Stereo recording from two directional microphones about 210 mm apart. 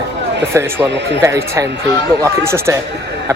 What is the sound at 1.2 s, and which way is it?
Speech, 15° right (ahead or behind).